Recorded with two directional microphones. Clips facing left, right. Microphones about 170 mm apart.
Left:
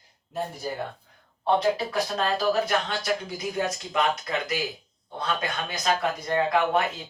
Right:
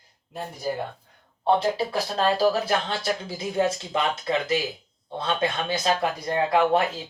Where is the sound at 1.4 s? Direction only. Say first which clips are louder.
Right 1 dB; 30° right (ahead or behind).